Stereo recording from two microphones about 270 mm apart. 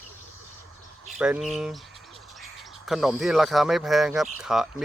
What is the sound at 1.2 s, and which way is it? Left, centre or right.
Speech, centre.